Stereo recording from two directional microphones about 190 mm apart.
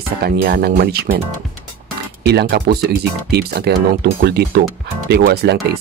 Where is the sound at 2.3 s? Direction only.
55° right (ahead or behind).